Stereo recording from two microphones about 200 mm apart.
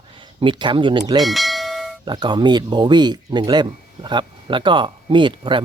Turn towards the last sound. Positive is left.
turn(degrees=-25)  # may be behind; listen again after turning